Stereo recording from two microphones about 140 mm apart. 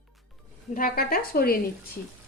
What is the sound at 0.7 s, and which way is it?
Speech, 90° left.